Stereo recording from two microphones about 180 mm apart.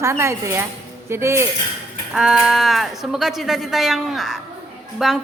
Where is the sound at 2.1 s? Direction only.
5° right (ahead or behind).